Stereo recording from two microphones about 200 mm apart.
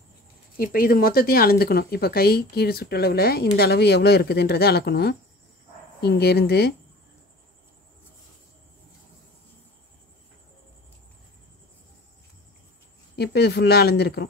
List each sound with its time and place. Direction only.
0.6 s speech: 45° left (ahead or behind)
13.1 s speech: 55° left (ahead or behind)